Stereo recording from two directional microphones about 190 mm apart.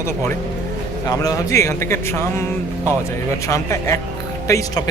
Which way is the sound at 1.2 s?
20° left (ahead or behind).